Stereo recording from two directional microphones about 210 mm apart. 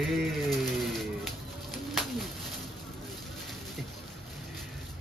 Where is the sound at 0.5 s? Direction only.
Centre (ahead or behind).